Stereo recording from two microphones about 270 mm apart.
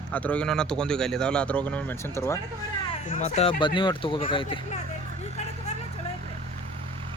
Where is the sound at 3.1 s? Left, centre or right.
Left.